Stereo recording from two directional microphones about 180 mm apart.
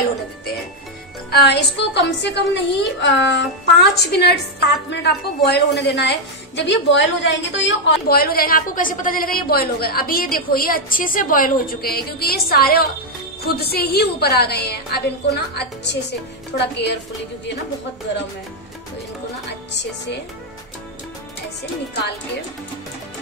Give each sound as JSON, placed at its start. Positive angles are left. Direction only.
{"t": 1.3, "sound": "a woman's voice", "side_deg": 70}
{"t": 3.9, "sound": "a woman's voice", "side_deg": 65}
{"t": 19.7, "sound": "a woman's voice", "side_deg": 75}